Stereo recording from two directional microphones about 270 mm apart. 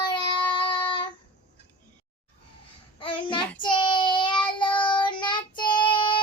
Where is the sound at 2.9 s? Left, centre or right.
Centre.